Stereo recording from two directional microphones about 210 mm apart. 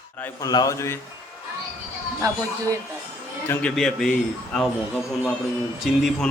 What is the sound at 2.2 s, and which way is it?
Speech, 15° right (ahead or behind).